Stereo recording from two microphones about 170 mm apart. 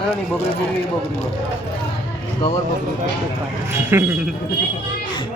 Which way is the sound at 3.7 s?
15° right (ahead or behind).